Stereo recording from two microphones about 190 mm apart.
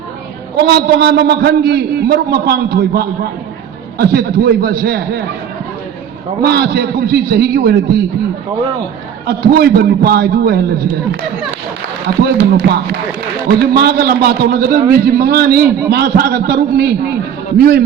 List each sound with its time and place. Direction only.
0.6 s a man's voice: 60° right (ahead or behind)
6.4 s a man's voice: 60° right (ahead or behind)
9.2 s a man's voice: 55° right (ahead or behind)
12.2 s a man's voice: 55° right (ahead or behind)